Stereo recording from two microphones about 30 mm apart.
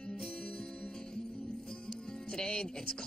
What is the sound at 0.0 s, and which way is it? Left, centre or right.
Music, left.